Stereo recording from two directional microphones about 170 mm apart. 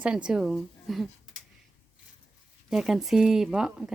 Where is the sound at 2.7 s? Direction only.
5° right (ahead or behind).